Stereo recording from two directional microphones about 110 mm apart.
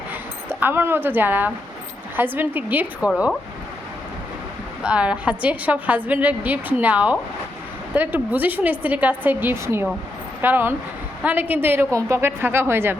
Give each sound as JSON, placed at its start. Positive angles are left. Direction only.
{"t": 0.6, "sound": "a woman's voice", "side_deg": -20}
{"t": 4.8, "sound": "a woman's voice", "side_deg": -10}